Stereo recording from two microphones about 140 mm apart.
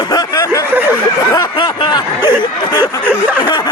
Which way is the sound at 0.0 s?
30° left (ahead or behind).